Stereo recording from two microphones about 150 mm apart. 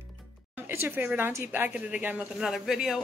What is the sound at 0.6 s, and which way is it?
Speech, 15° right (ahead or behind).